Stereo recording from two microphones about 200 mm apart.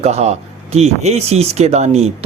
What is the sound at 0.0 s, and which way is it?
Speech, 35° right (ahead or behind).